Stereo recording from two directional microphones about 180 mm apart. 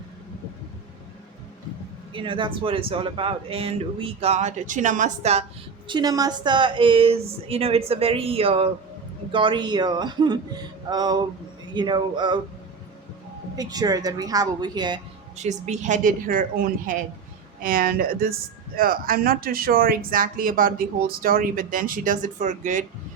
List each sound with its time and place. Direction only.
2.1 s speech: 25° right (ahead or behind)
5.9 s a woman's voice: 20° right (ahead or behind)
13.6 s a woman's voice: 20° right (ahead or behind)
15.4 s speech: 40° right (ahead or behind)